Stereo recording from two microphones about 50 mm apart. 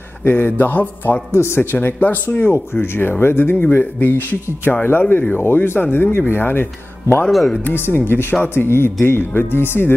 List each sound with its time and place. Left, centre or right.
0.2 s a man's voice: left
1.3 s speech: left
1.6 s speech: left
3.7 s speech: left
7.2 s speech: centre
7.7 s speech: left